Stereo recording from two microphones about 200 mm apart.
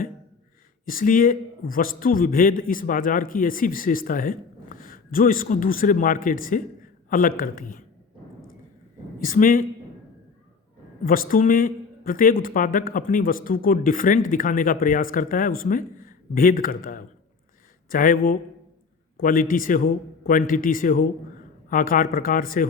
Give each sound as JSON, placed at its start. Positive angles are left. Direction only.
{"t": 0.9, "sound": "a man's voice", "side_deg": 45}
{"t": 9.2, "sound": "a man's voice", "side_deg": 45}
{"t": 11.0, "sound": "a man's voice", "side_deg": 45}